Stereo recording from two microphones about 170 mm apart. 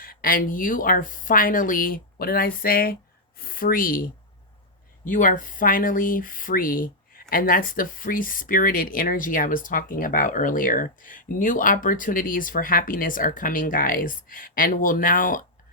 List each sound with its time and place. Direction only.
0.0 s speech: 60° left (ahead or behind)